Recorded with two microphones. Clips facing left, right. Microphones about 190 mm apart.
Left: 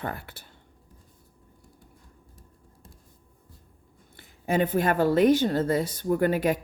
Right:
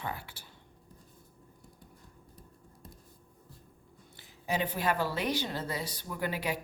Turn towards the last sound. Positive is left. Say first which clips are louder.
# left 11 dB
turn(degrees=50)  # may be behind; listen again after turning